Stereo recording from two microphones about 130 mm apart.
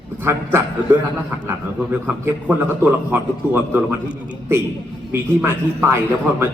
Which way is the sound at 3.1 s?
15° right (ahead or behind).